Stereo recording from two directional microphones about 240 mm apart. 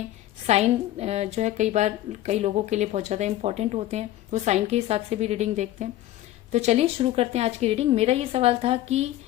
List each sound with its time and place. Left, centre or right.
0.4 s a woman's voice: right